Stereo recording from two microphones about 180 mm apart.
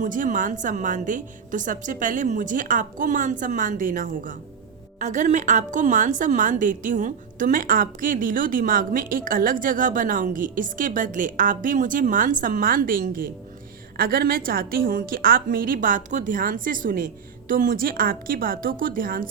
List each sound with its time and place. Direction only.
0.0 s a woman's voice: 45° right (ahead or behind)